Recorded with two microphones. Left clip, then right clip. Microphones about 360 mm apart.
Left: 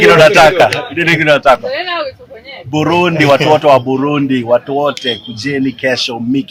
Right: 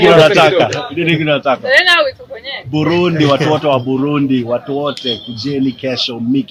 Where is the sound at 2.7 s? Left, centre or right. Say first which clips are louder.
Left 3 dB; left.